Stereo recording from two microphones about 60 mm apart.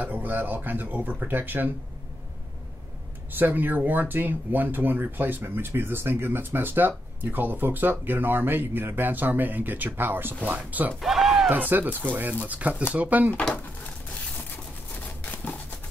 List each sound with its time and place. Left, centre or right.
0.0 s speech: right
3.3 s speech: right
11.0 s music: centre
11.5 s speech: right
13.3 s speech: centre
15.2 s a sound: left